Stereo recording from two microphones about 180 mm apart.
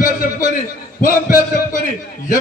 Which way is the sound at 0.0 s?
50° left (ahead or behind).